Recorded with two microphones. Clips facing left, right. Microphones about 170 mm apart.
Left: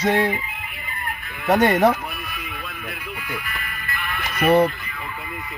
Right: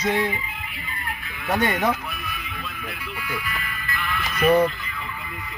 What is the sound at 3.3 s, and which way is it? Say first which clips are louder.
Music: right 2 dB; 50° left (ahead or behind).